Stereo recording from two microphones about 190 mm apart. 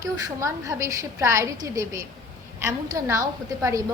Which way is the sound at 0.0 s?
15° right (ahead or behind).